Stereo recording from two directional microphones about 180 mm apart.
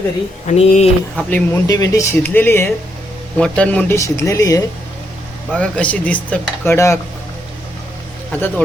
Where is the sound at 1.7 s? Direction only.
20° left (ahead or behind).